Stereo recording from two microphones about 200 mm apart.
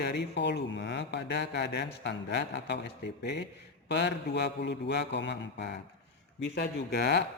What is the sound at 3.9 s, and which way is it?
Speech, 60° left (ahead or behind).